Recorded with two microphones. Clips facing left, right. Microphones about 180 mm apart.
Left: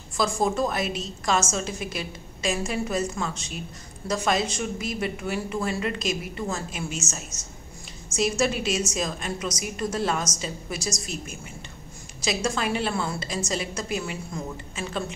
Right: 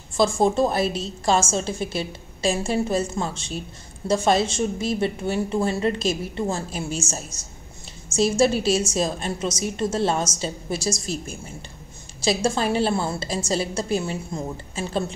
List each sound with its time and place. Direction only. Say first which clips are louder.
0.1 s a woman's voice: right 5 dB; 30° right (ahead or behind)